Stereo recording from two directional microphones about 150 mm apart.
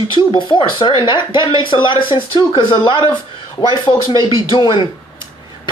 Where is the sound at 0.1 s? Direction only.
30° left (ahead or behind).